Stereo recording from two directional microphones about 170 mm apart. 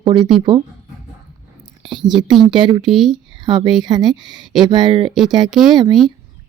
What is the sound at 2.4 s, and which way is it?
Speech, 25° right (ahead or behind).